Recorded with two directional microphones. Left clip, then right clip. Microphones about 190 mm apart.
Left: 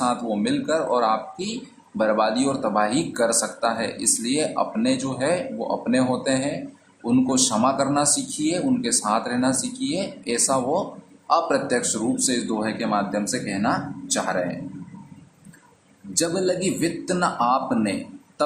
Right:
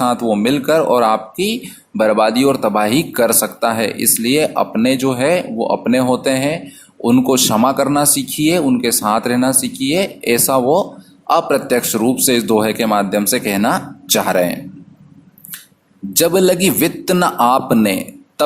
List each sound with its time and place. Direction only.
0.0 s speech: 40° right (ahead or behind)
16.1 s speech: 45° right (ahead or behind)